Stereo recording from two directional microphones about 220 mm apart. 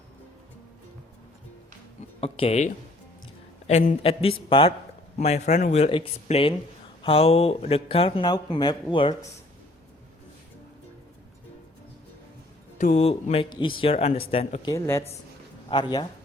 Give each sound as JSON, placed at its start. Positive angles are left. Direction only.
{"t": 2.2, "sound": "speech", "side_deg": 25}
{"t": 12.8, "sound": "speech", "side_deg": 30}